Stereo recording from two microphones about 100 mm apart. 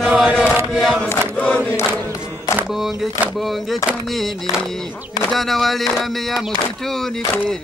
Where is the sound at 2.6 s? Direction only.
5° right (ahead or behind).